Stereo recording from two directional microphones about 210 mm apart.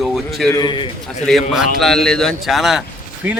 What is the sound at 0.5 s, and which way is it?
Speech, 20° left (ahead or behind).